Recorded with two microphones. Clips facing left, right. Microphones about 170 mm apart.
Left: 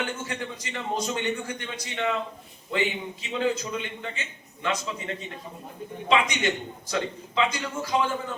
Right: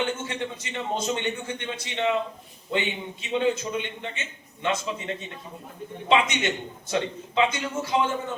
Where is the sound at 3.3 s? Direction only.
25° right (ahead or behind).